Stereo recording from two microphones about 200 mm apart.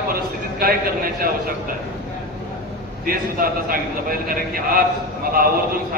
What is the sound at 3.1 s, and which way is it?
A man's voice, 45° right (ahead or behind).